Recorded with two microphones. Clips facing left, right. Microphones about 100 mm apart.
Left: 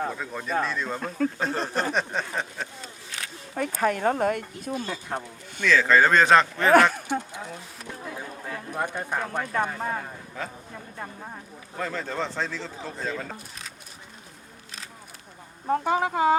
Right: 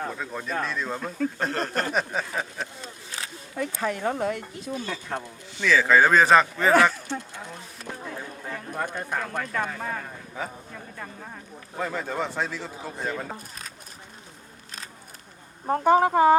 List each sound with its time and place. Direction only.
0.1 s speech: centre (ahead or behind)
0.9 s speech: 50° left (ahead or behind)
1.4 s speech: centre (ahead or behind)
3.5 s speech: 50° left (ahead or behind)
4.7 s speech: 10° left (ahead or behind)
5.6 s speech: 10° right (ahead or behind)
8.0 s chatter: 5° left (ahead or behind)
8.8 s speech: 20° left (ahead or behind)
11.8 s a man's voice: 10° right (ahead or behind)
15.7 s speech: 45° right (ahead or behind)